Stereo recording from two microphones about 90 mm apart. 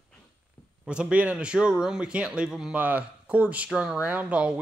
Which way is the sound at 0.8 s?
10° right (ahead or behind).